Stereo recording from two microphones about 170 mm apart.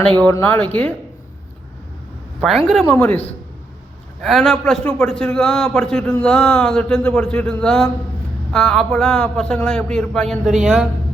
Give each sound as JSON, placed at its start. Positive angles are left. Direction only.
{"t": 0.2, "sound": "speech", "side_deg": 10}
{"t": 2.4, "sound": "a man's voice", "side_deg": 0}
{"t": 2.8, "sound": "speech", "side_deg": 10}
{"t": 4.2, "sound": "a man's voice", "side_deg": 0}